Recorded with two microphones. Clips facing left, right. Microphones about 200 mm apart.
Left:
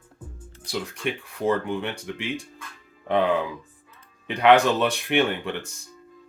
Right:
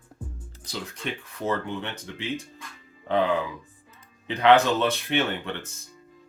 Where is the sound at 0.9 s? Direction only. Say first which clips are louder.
Left 4 dB; 15° left (ahead or behind).